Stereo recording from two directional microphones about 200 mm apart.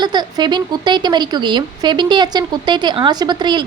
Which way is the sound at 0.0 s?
20° right (ahead or behind).